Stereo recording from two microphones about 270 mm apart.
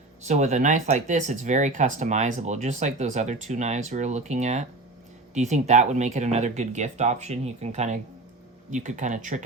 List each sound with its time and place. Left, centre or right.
0.3 s speech: right